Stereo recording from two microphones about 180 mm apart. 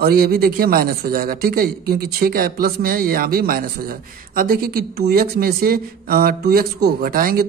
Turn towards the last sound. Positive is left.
turn(degrees=-55)  # may be behind; listen again after turning